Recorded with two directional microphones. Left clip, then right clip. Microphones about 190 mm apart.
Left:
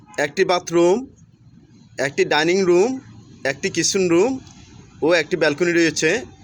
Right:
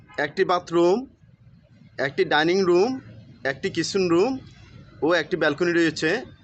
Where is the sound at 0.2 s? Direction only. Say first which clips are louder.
Left 4 dB; 20° left (ahead or behind).